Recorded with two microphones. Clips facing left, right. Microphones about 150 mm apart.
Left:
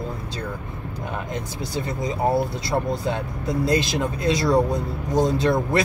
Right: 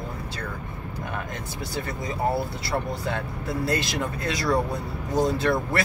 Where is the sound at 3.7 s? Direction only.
20° left (ahead or behind).